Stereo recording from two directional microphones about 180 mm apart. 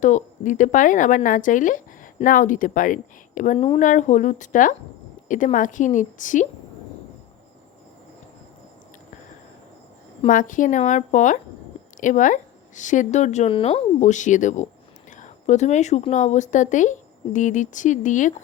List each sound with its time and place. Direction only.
0.0 s speech: 45° left (ahead or behind)
10.2 s speech: 45° left (ahead or behind)